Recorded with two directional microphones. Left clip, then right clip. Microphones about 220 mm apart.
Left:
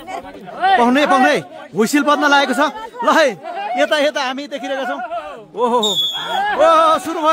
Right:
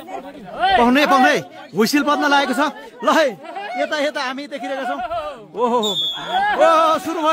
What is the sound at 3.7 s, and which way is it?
A man's voice, 20° left (ahead or behind).